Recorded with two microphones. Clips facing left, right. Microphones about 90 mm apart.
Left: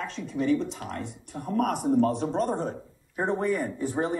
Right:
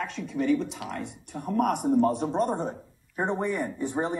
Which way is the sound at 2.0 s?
15° right (ahead or behind).